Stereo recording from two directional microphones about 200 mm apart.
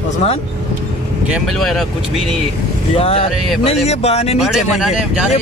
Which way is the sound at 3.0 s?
30° left (ahead or behind).